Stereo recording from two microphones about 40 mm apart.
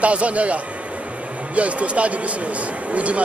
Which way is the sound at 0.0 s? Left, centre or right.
Right.